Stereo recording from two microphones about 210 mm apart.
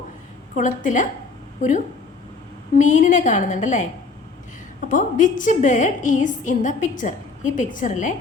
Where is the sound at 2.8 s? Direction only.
35° left (ahead or behind).